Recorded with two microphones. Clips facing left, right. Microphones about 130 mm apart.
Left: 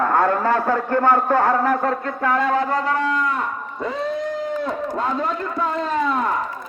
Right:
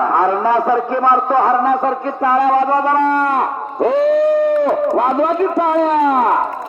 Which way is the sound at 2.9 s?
60° right (ahead or behind).